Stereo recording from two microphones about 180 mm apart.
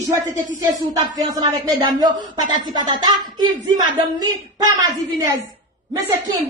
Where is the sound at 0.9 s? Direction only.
20° right (ahead or behind).